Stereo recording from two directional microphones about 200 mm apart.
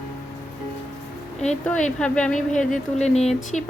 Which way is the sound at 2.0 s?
5° left (ahead or behind).